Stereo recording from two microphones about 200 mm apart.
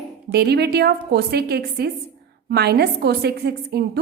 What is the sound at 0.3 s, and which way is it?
A woman's voice, 55° right (ahead or behind).